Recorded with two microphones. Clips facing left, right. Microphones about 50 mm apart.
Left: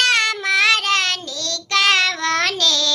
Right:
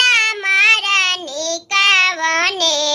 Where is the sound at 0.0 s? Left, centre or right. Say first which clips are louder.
Right 3 dB; right.